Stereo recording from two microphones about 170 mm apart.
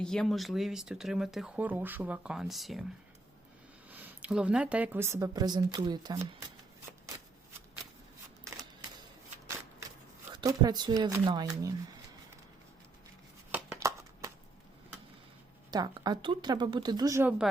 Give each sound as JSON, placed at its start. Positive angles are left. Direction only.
{"t": 0.0, "sound": "speech", "side_deg": 5}
{"t": 3.8, "sound": "speech", "side_deg": -10}
{"t": 10.3, "sound": "speech", "side_deg": -25}
{"t": 13.7, "sound": "a sound", "side_deg": -20}
{"t": 15.7, "sound": "speech", "side_deg": -25}
{"t": 17.2, "sound": "speech", "side_deg": -5}